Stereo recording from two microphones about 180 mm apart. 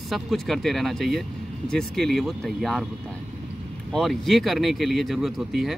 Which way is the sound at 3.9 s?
Centre (ahead or behind).